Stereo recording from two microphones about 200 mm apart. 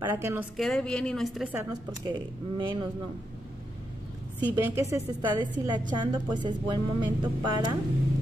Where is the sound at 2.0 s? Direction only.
20° right (ahead or behind).